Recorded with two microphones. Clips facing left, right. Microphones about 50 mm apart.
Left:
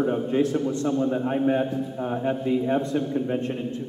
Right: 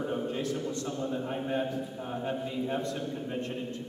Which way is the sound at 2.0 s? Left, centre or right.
Left.